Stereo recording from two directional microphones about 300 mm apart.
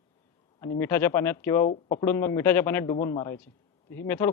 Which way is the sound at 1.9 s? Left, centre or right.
Centre.